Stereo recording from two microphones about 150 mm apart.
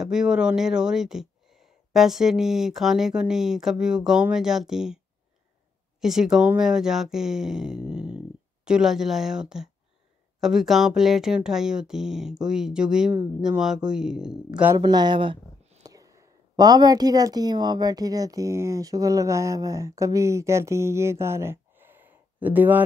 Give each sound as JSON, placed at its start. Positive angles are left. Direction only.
{"t": 0.0, "sound": "speech", "side_deg": -5}
{"t": 14.8, "sound": "a woman's voice", "side_deg": -30}